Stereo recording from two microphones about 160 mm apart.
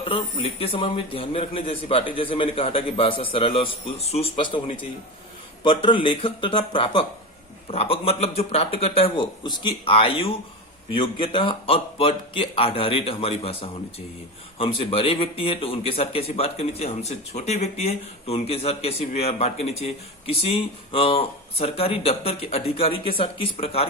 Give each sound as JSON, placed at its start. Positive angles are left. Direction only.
{"t": 0.0, "sound": "speech", "side_deg": 35}